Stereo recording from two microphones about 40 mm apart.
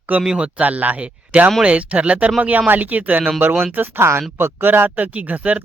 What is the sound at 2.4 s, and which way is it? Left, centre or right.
Speech, right.